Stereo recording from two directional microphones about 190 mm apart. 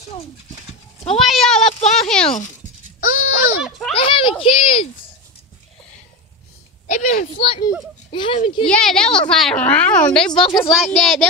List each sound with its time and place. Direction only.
1.1 s speech: centre (ahead or behind)
3.0 s a sound: 45° left (ahead or behind)
3.6 s a sound: centre (ahead or behind)
3.9 s speech: 25° left (ahead or behind)
6.9 s speech: 40° left (ahead or behind)
8.6 s speech: 5° left (ahead or behind)
10.4 s speech: 30° left (ahead or behind)
10.9 s speech: 5° left (ahead or behind)